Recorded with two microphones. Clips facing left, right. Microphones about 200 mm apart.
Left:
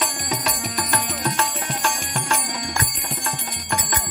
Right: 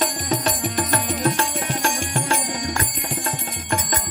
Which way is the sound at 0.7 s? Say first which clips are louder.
Right 3 dB; 35° right (ahead or behind).